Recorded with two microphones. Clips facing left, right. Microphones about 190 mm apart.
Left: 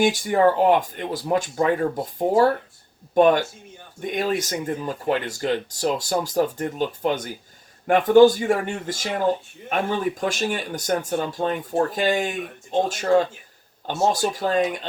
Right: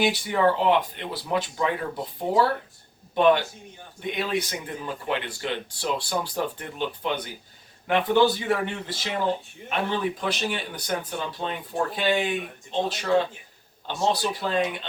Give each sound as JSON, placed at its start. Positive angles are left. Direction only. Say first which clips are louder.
{"t": 0.0, "sound": "speech", "louder": "left 4 dB", "side_deg": 45}